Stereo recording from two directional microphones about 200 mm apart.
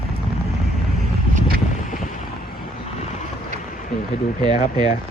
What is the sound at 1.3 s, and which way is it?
Boat, 50° right (ahead or behind).